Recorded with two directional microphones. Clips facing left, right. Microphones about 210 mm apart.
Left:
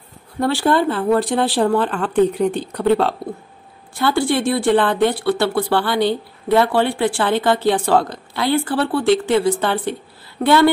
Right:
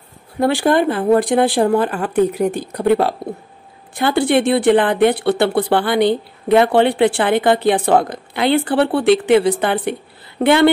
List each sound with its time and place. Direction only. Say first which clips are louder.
0.4 s speech: right 2 dB; 15° right (ahead or behind)